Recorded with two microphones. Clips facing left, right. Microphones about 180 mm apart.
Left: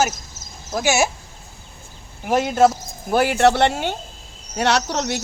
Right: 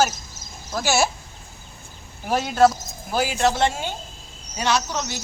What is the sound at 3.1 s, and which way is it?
Speech, 60° left (ahead or behind).